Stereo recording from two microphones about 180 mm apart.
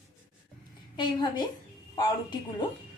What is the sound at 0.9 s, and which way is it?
A woman's voice, 25° left (ahead or behind).